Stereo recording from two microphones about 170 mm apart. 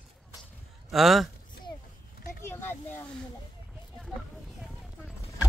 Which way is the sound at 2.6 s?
15° left (ahead or behind).